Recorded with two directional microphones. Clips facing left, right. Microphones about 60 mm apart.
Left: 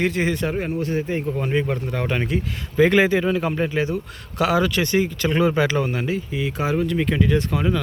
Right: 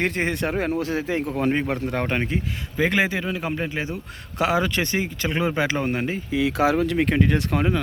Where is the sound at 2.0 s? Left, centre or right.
Right.